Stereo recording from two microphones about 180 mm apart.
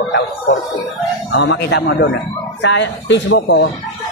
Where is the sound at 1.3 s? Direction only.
80° left.